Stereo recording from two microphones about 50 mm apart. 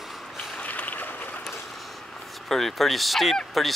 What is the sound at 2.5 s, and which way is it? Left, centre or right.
Speech, centre.